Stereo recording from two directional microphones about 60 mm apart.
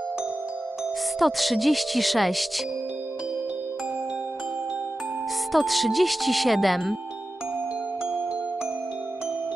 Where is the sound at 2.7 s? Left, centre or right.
Right.